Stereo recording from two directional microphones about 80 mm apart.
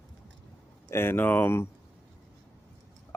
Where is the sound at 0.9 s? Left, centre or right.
Left.